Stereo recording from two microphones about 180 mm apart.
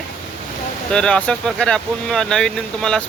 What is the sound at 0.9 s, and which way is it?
Speech, 5° left (ahead or behind).